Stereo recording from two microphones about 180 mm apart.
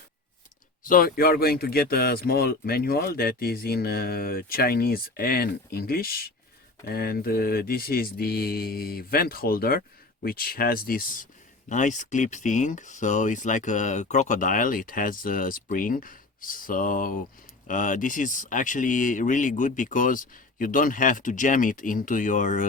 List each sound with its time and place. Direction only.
0.9 s speech: 50° left (ahead or behind)